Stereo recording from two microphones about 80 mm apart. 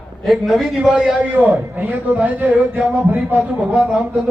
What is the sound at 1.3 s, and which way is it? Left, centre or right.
A man's voice, right.